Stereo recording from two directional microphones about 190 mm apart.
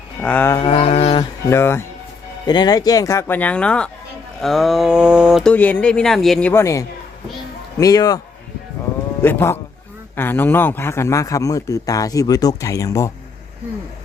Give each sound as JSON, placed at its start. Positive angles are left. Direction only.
{"t": 0.2, "sound": "a man's voice", "side_deg": 10}
{"t": 0.6, "sound": "a sound", "side_deg": 30}
{"t": 1.2, "sound": "a man's voice", "side_deg": 15}
{"t": 6.5, "sound": "a man's voice", "side_deg": 15}
{"t": 9.2, "sound": "a man's voice", "side_deg": 10}